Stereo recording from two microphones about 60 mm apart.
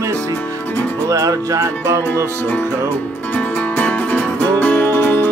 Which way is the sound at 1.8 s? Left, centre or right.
Right.